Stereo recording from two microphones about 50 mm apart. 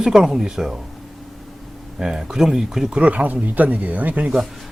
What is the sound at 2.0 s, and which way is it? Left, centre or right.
A man's voice, centre.